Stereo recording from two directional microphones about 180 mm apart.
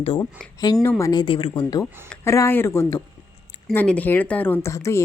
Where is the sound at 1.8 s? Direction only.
10° left (ahead or behind).